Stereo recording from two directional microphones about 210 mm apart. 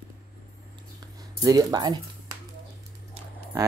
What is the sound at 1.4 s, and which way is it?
Speech, 20° right (ahead or behind).